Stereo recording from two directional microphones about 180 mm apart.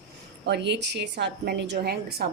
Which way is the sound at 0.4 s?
70° right (ahead or behind).